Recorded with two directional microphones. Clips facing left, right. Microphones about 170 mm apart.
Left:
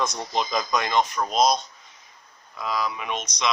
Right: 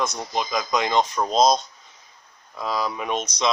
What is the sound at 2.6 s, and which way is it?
Speech, 35° right (ahead or behind).